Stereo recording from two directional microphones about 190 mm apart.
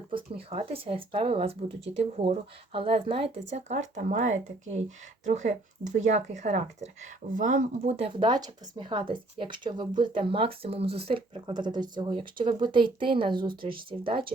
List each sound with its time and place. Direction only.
0.5 s speech: 30° right (ahead or behind)